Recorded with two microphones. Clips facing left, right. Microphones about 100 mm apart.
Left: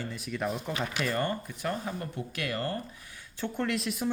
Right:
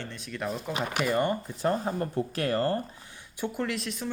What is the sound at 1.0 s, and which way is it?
Speech, 15° right (ahead or behind).